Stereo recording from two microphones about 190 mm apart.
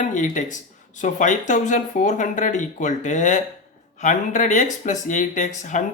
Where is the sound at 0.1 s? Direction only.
40° left (ahead or behind).